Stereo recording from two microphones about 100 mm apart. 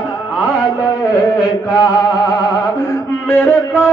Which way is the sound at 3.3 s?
20° left (ahead or behind).